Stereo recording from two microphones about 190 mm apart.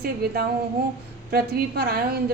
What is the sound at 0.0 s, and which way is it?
A woman's voice, 55° right (ahead or behind).